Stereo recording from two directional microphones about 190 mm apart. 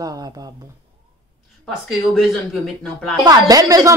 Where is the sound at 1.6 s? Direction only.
Centre (ahead or behind).